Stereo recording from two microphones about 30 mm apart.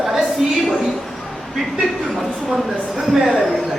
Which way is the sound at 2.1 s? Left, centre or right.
Centre.